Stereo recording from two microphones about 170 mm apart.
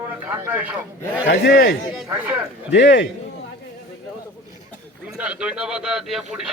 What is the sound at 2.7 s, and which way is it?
Speech, 85° left.